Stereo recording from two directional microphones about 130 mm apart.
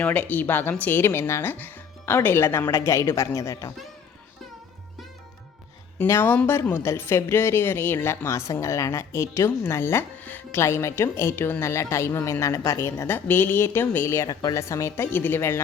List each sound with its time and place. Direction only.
0.0 s a woman's voice: 15° left (ahead or behind)
6.0 s speech: 15° left (ahead or behind)